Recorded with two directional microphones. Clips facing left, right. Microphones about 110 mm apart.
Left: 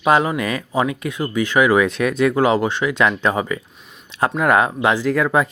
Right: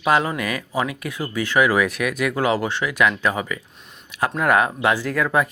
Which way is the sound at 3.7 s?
Centre (ahead or behind).